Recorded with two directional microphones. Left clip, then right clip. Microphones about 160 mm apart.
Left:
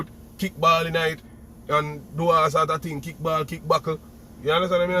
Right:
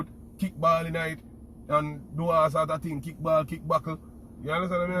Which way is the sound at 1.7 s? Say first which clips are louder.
Left 3 dB; 15° right (ahead or behind).